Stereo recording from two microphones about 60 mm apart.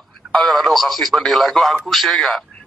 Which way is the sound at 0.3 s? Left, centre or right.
Centre.